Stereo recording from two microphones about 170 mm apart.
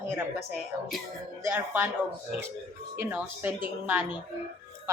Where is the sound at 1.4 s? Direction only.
10° right (ahead or behind).